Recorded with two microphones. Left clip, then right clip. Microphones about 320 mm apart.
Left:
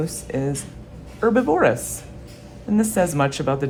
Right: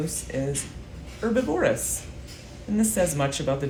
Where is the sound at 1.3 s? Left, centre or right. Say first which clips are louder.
Left 5 dB; centre.